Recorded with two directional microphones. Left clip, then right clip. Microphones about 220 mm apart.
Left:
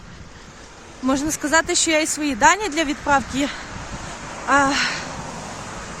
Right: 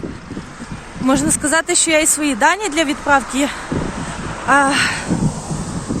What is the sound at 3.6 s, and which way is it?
Vehicle, 40° right (ahead or behind).